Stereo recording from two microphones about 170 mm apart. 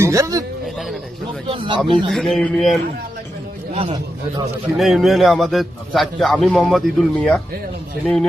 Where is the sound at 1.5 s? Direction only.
30° right (ahead or behind).